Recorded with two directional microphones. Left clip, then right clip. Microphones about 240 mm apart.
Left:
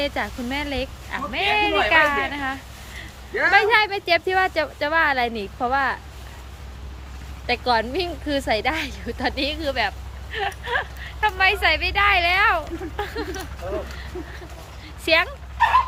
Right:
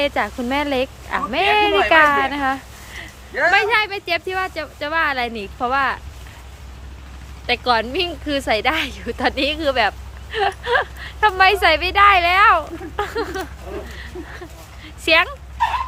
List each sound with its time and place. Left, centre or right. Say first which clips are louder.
0.0 s speech: right 5 dB; centre
3.5 s speech: left 1 dB; centre
7.4 s speech: right 3 dB; centre
15.0 s speech: right 4 dB; centre